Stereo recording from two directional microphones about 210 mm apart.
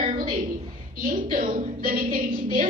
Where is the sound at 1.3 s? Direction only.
40° right (ahead or behind).